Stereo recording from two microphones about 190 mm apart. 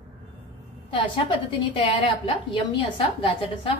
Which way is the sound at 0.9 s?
25° left (ahead or behind).